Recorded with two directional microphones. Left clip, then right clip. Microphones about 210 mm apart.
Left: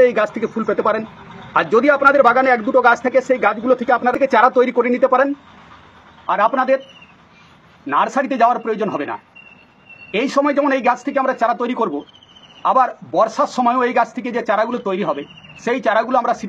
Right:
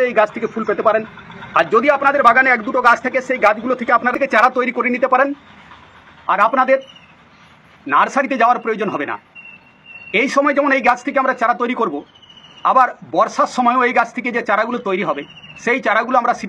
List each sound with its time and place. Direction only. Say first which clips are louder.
0.0 s a man's voice: left 1 dB; 55° left (ahead or behind); by 5.3 s 35° left (ahead or behind)
6.2 s speech: right 2 dB; 15° left (ahead or behind)
7.8 s speech: right 2 dB; 10° left (ahead or behind)